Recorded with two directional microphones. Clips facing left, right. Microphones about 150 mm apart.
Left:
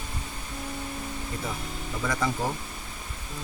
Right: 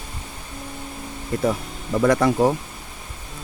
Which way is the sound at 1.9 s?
75° right (ahead or behind).